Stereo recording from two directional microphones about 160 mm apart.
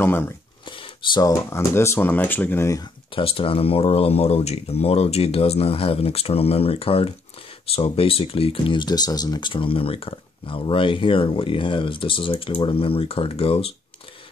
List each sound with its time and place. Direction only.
0.0 s speech: 15° left (ahead or behind)
0.7 s a sound: 30° left (ahead or behind)
1.2 s speech: 15° left (ahead or behind)
3.2 s speech: 35° left (ahead or behind)